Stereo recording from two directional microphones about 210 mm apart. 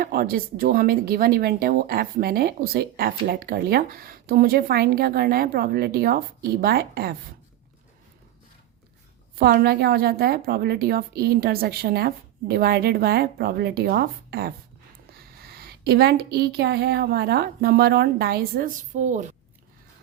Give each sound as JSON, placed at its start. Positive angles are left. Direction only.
{"t": 0.0, "sound": "speech", "side_deg": -45}
{"t": 9.4, "sound": "speech", "side_deg": -50}